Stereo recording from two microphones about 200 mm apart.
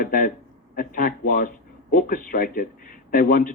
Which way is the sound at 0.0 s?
45° left (ahead or behind).